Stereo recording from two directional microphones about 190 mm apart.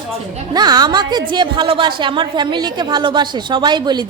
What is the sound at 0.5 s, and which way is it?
A woman's voice, 20° right (ahead or behind).